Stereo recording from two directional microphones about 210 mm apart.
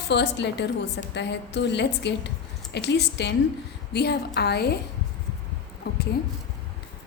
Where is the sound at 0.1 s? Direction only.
55° left (ahead or behind).